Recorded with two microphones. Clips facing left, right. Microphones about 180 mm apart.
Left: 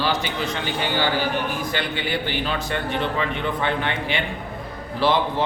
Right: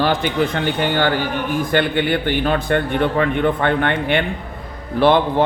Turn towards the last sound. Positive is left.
turn(degrees=-55)  # may be behind; listen again after turning